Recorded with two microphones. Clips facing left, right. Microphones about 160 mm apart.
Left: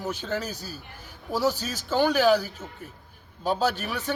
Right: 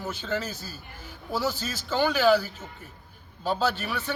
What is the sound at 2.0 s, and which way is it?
Speech, 40° left (ahead or behind).